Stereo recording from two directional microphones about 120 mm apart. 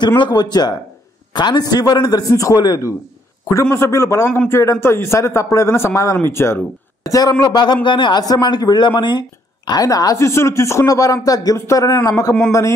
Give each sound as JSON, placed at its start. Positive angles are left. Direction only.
{"t": 0.2, "sound": "speech", "side_deg": 35}
{"t": 3.7, "sound": "speech", "side_deg": 25}